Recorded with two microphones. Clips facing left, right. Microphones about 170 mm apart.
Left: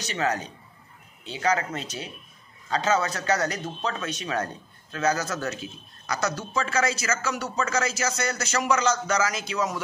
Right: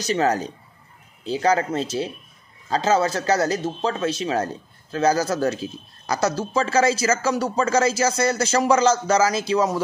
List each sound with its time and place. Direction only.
0.0 s a man's voice: 35° right (ahead or behind)